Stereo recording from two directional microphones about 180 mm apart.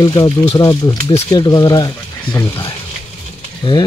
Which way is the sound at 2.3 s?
10° left (ahead or behind).